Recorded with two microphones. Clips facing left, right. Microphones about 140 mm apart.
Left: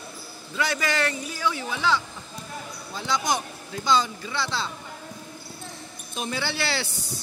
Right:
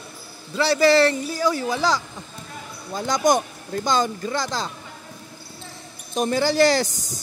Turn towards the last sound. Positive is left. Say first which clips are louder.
# right 8 dB
turn(degrees=-45)  # may be behind; listen again after turning